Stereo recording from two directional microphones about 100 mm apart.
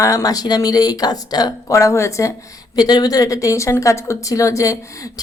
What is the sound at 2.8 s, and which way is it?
A woman's voice, 40° left (ahead or behind).